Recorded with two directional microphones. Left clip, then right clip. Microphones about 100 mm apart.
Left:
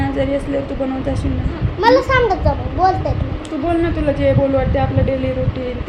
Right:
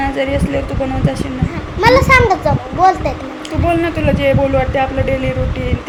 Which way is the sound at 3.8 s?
25° left (ahead or behind).